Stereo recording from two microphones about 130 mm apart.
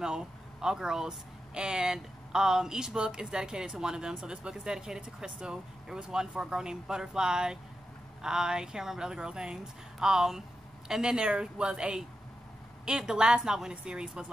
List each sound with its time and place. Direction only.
0.0 s a woman's voice: 5° right (ahead or behind)